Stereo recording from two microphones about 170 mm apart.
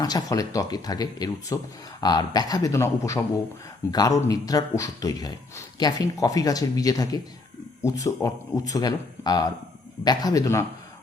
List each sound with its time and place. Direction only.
0.0 s speech: 20° left (ahead or behind)